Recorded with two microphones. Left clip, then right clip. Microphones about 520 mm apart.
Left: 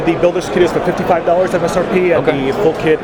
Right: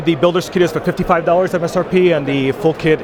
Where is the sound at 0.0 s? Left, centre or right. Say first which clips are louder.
Left 1 dB; right.